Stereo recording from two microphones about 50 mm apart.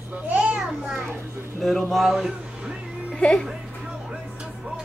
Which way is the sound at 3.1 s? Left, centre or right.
Left.